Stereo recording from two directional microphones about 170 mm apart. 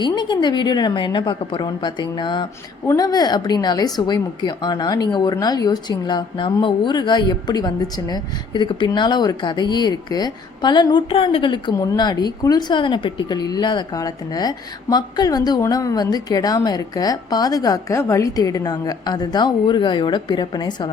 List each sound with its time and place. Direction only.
0.0 s a woman's voice: 25° left (ahead or behind)